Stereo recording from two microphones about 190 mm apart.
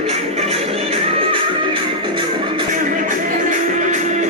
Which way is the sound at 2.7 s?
45° right (ahead or behind).